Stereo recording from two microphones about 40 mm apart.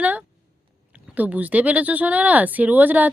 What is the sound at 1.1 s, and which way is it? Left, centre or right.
Speech, right.